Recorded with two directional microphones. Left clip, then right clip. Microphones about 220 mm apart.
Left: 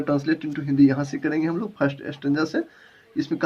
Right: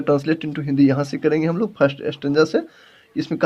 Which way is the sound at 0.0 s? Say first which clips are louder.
Right 4 dB; 50° right (ahead or behind).